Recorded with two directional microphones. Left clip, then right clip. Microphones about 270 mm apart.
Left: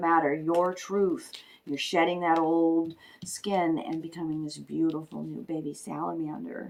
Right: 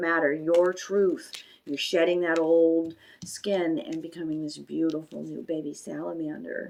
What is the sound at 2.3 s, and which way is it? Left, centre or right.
Speech, right.